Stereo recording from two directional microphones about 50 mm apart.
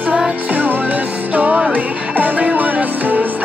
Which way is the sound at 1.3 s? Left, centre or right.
Right.